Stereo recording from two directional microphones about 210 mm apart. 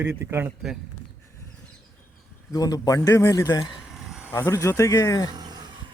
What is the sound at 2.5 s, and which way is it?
Speech, 15° left (ahead or behind).